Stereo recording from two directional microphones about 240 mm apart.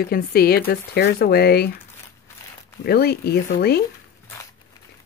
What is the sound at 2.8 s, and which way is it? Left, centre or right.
Speech, left.